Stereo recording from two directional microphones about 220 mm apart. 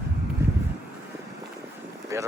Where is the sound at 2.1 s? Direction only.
10° right (ahead or behind).